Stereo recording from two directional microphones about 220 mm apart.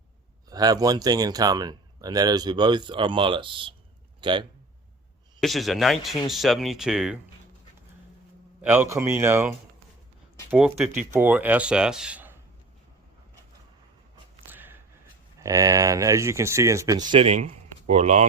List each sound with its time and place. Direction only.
0.5 s speech: 15° right (ahead or behind)
5.4 s speech: centre (ahead or behind)
8.6 s speech: 10° right (ahead or behind)
14.4 s a sound: 10° right (ahead or behind)
15.4 s speech: 15° right (ahead or behind); by 18.3 s 30° right (ahead or behind)